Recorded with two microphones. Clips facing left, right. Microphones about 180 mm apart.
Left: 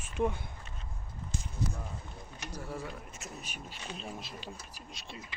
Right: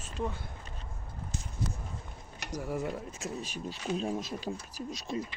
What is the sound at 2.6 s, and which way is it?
Speech, 10° right (ahead or behind).